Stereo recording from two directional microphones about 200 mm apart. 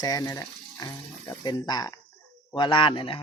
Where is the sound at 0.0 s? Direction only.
15° left (ahead or behind).